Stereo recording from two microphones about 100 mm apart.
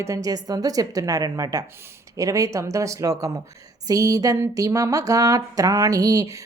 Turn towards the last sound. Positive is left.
turn(degrees=-35)  # may be behind; listen again after turning